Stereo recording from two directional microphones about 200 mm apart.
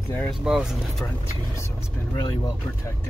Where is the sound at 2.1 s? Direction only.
15° left (ahead or behind).